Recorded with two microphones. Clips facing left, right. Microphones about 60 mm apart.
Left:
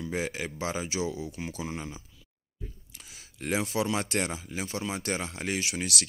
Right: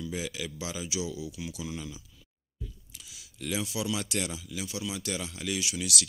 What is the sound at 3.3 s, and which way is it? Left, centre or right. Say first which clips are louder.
Speech: left 4 dB; left.